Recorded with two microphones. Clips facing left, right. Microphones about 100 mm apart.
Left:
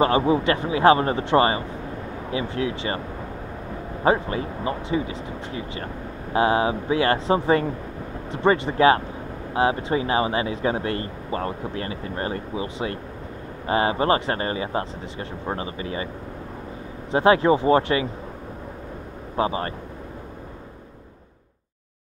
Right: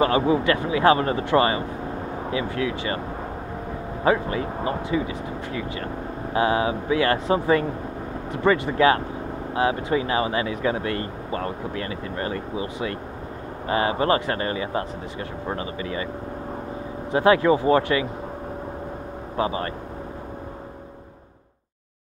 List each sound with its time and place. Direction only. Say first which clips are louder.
0.0 s speech: even; 30° left (ahead or behind)
4.0 s speech: even; 30° left (ahead or behind)
17.1 s speech: even; 25° left (ahead or behind)
19.3 s speech: left 1 dB; 30° left (ahead or behind)